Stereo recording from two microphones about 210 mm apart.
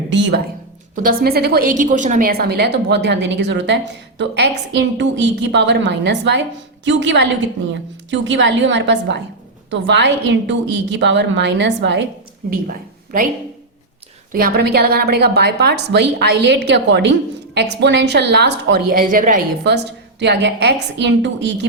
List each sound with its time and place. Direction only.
0.1 s a woman's voice: 55° right (ahead or behind)
12.5 s a woman's voice: 40° right (ahead or behind)
14.3 s a woman's voice: 45° right (ahead or behind)
19.6 s a woman's voice: 55° right (ahead or behind)